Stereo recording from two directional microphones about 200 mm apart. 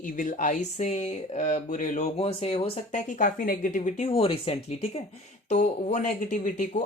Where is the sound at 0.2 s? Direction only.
40° left (ahead or behind).